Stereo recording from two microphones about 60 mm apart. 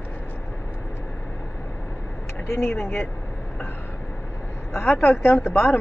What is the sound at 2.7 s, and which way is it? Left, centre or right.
Speech, left.